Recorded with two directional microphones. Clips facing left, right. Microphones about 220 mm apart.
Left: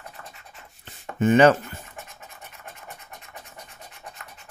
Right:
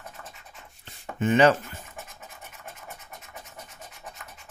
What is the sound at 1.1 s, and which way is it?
Speech, 50° left (ahead or behind).